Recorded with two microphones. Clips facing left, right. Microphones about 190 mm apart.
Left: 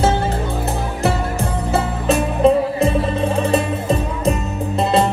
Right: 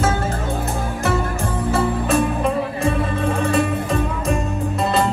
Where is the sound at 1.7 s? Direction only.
25° left (ahead or behind).